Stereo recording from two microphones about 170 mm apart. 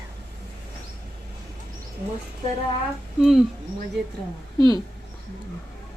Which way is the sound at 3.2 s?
Centre (ahead or behind).